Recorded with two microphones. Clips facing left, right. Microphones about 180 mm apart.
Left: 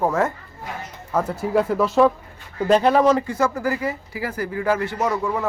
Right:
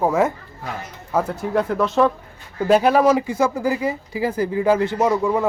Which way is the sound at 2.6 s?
5° right (ahead or behind).